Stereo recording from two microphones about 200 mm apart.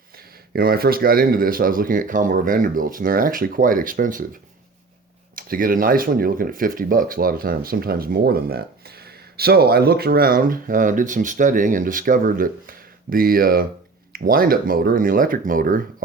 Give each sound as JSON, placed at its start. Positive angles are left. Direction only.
{"t": 0.5, "sound": "speech", "side_deg": -50}
{"t": 5.3, "sound": "speech", "side_deg": -45}